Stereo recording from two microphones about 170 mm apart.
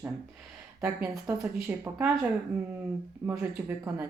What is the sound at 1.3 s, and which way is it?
Speech, 10° right (ahead or behind).